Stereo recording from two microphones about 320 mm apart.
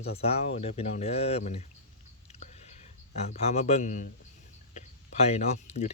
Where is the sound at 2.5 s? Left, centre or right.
Left.